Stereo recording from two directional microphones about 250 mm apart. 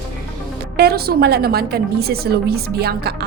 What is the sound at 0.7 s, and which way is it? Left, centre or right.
A woman's voice, right.